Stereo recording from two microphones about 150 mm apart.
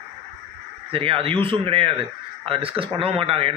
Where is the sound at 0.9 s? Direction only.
40° right (ahead or behind).